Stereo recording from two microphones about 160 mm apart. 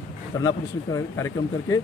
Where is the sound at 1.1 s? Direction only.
15° left (ahead or behind).